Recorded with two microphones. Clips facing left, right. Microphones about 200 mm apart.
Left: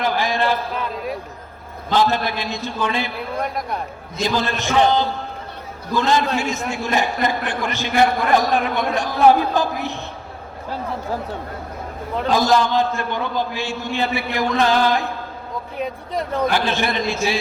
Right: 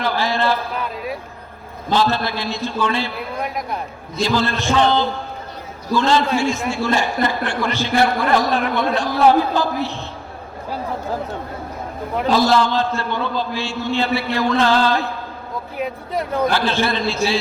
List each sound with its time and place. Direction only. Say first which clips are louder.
0.0 s a man's voice: even; 15° left (ahead or behind)
0.9 s speech: left 1 dB; 5° right (ahead or behind)
2.0 s a man's voice: left 1 dB; 15° left (ahead or behind)
3.4 s speech: right 1 dB; 5° right (ahead or behind)
4.2 s a man's voice: right 2 dB; 15° left (ahead or behind)
12.3 s a man's voice: right 1 dB; 15° left (ahead or behind)
15.8 s speech: right 1 dB; centre (ahead or behind)
16.5 s a man's voice: right 1 dB; 15° left (ahead or behind)